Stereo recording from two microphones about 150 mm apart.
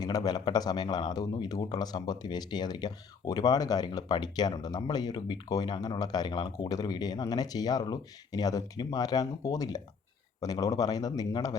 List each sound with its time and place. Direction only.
0.0 s speech: 25° left (ahead or behind)